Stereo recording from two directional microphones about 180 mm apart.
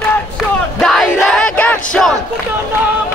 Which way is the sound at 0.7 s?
Centre (ahead or behind).